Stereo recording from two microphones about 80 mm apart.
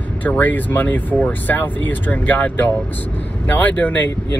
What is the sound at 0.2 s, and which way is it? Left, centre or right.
Speech, left.